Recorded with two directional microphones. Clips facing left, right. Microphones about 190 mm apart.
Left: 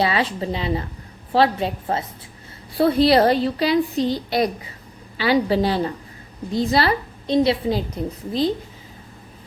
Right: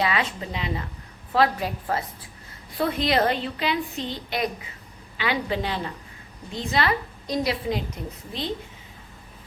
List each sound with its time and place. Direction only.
0.0 s a woman's voice: 30° left (ahead or behind)